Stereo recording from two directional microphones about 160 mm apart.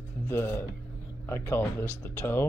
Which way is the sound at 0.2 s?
15° left (ahead or behind).